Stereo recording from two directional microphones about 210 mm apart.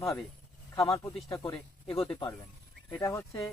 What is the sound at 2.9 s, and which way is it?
Speech, 15° left (ahead or behind).